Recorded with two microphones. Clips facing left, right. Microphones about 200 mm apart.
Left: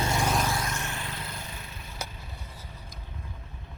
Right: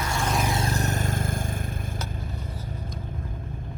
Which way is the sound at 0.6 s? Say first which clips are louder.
Right 7 dB; 35° right (ahead or behind).